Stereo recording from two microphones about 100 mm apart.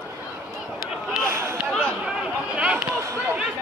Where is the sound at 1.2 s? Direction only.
25° right (ahead or behind).